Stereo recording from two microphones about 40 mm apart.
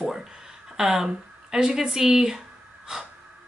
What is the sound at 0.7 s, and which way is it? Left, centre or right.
Speech, centre.